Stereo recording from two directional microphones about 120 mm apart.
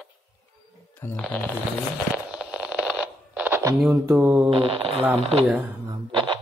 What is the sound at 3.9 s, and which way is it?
Mantra, 15° right (ahead or behind).